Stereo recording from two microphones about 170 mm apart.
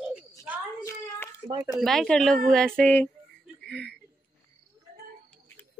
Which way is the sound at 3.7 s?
5° left (ahead or behind).